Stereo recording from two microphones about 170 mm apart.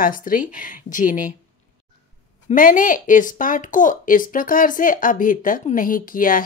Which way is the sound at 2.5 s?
50° left (ahead or behind).